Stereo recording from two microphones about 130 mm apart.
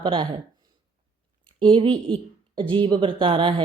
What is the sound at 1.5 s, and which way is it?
Speech, 40° right (ahead or behind).